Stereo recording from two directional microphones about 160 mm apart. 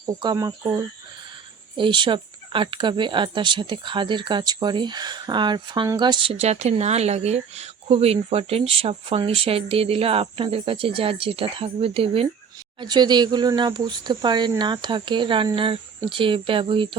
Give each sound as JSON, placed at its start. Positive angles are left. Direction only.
{"t": 0.0, "sound": "speech", "side_deg": -25}
{"t": 1.7, "sound": "speech", "side_deg": -30}